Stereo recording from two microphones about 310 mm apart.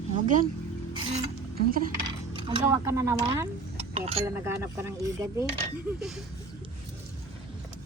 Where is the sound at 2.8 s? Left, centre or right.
Centre.